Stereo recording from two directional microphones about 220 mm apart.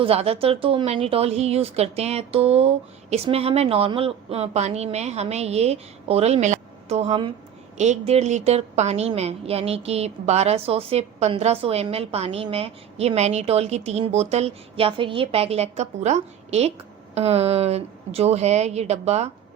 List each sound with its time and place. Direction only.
0.0 s a woman's voice: 25° right (ahead or behind)